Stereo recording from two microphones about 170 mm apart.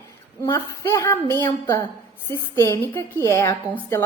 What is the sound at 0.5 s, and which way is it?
Speech, 20° left (ahead or behind).